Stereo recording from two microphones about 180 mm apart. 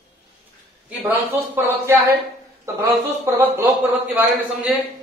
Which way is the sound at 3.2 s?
10° right (ahead or behind).